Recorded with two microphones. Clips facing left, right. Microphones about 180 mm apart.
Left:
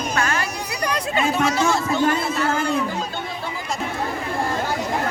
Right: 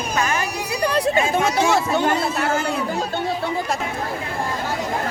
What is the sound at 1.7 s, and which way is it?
Speech, 60° right (ahead or behind).